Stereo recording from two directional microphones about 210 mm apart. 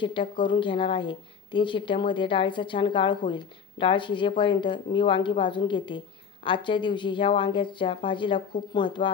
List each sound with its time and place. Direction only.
0.0 s a woman's voice: 25° left (ahead or behind)